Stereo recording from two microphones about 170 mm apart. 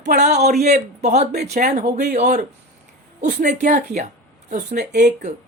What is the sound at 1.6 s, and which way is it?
Speech, 50° right (ahead or behind).